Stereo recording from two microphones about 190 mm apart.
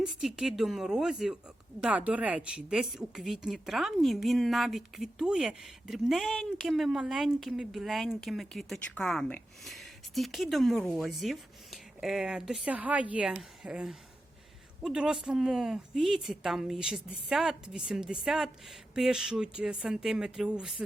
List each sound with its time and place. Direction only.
0.0 s a woman's voice: centre (ahead or behind)